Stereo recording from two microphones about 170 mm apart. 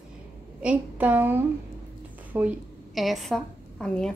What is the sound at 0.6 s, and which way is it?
A woman's voice, 5° right (ahead or behind).